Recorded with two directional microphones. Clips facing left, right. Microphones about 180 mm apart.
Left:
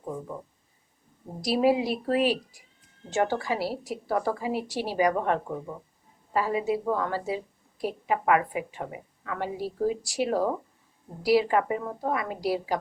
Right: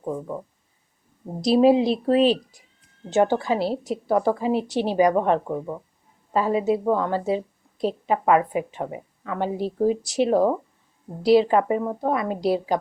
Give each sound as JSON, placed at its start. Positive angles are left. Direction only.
{"t": 1.4, "sound": "a woman's voice", "side_deg": -25}